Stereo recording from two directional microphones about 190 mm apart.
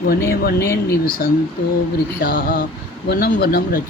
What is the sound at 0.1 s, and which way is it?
Speech, 55° left (ahead or behind).